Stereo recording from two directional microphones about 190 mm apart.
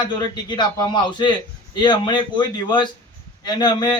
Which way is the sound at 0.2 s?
25° left (ahead or behind).